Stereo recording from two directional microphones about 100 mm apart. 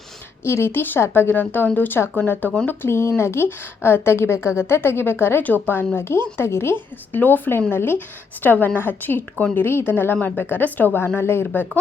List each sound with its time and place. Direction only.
0.4 s a woman's voice: 25° left (ahead or behind)